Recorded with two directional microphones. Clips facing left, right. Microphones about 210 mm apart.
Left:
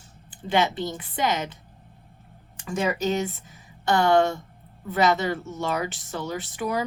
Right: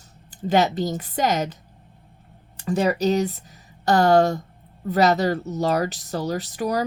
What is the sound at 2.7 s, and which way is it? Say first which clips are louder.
Speech: right 5 dB; 35° right (ahead or behind).